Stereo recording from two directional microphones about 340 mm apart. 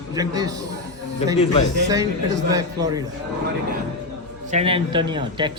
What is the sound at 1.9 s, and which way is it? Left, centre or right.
A man's voice, centre.